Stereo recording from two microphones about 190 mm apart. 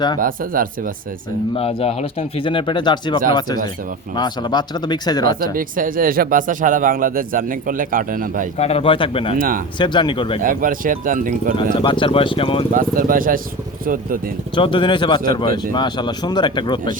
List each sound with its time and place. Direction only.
0.2 s speech: 45° right (ahead or behind)
1.5 s speech: 30° left (ahead or behind)
5.4 s speech: 45° right (ahead or behind)
8.5 s speech: 30° left (ahead or behind)
9.4 s speech: 45° right (ahead or behind)
9.7 s speech: 25° left (ahead or behind)
10.4 s speech: 45° right (ahead or behind)
11.5 s speech: 25° left (ahead or behind)
12.7 s speech: 45° right (ahead or behind)
14.5 s speech: 25° left (ahead or behind)